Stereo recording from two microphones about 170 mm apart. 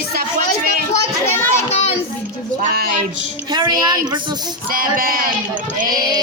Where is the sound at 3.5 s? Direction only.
25° right (ahead or behind).